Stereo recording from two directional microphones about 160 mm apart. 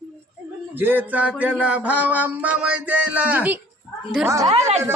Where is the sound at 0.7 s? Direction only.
10° right (ahead or behind).